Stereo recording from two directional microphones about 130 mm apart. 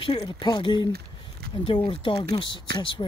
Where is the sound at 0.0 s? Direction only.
40° left (ahead or behind).